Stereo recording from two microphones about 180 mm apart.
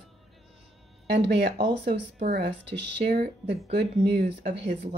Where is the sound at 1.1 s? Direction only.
70° right (ahead or behind).